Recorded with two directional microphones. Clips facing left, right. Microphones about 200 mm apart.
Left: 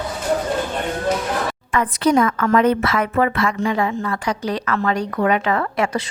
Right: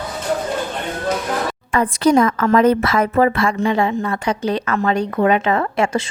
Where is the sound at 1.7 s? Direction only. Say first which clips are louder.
Right 3 dB; 35° right (ahead or behind).